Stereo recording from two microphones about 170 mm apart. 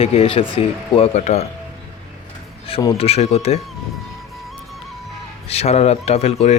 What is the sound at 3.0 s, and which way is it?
Speech, 35° left (ahead or behind).